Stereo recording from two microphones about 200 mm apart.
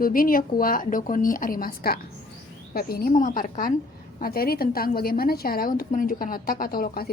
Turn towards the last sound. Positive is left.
turn(degrees=45)  # may be behind; listen again after turning